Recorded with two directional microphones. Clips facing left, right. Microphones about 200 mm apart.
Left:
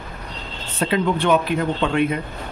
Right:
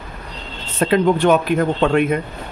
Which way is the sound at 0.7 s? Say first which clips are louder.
Right 5 dB; 50° right (ahead or behind).